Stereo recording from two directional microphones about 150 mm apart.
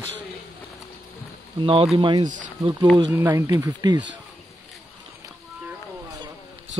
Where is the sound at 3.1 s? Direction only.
15° right (ahead or behind).